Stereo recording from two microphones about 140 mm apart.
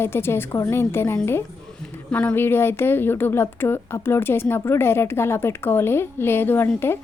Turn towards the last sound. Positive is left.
turn(degrees=15)  # may be behind; listen again after turning